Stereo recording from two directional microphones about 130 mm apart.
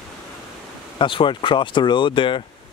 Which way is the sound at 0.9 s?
40° left (ahead or behind).